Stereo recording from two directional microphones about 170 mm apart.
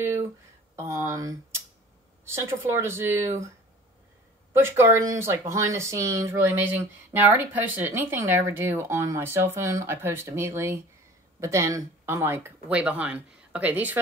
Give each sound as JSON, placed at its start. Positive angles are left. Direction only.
{"t": 0.7, "sound": "speech", "side_deg": -15}
{"t": 4.6, "sound": "speech", "side_deg": -15}